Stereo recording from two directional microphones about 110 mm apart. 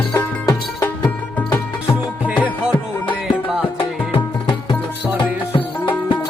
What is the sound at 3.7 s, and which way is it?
Music, 50° left (ahead or behind).